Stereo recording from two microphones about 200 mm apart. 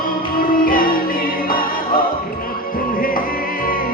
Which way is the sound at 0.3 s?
45° left (ahead or behind).